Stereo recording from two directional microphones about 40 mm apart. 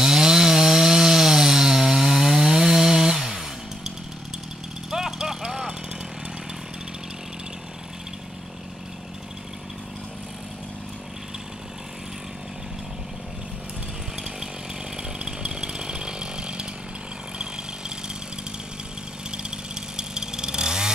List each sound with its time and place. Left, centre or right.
0.0 s chainsaw: centre
4.9 s vehicle: centre
15.1 s chainsaw: right
17.4 s a sound: centre
19.3 s chainsaw: centre